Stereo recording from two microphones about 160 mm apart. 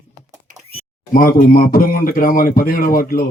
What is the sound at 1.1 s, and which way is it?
Speech, 65° left (ahead or behind).